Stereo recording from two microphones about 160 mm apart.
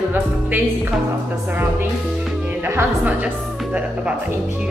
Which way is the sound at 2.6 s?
15° right (ahead or behind).